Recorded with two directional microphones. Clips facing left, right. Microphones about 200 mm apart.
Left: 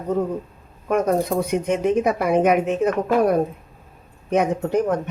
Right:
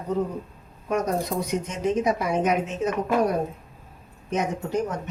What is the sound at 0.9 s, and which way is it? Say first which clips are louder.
A woman's voice: left 6 dB; 55° left (ahead or behind).